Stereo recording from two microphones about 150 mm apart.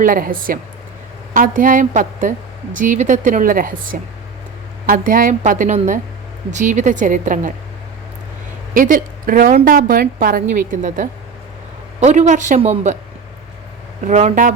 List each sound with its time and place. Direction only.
0.0 s a woman's voice: 65° right (ahead or behind)
8.7 s a woman's voice: 65° right (ahead or behind); by 13.0 s 50° right (ahead or behind)
14.0 s a woman's voice: 50° right (ahead or behind)